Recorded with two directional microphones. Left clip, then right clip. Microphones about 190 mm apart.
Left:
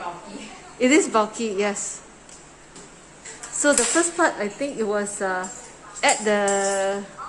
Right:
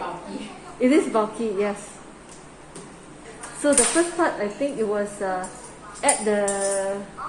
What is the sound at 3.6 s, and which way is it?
A woman's voice, 30° left (ahead or behind).